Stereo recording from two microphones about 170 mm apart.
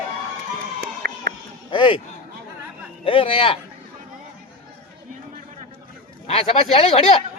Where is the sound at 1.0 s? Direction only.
70° right (ahead or behind).